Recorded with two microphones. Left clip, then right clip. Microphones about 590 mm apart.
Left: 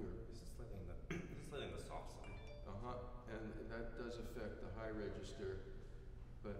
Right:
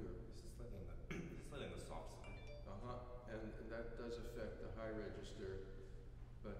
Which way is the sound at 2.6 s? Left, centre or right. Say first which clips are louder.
Left 3 dB; centre.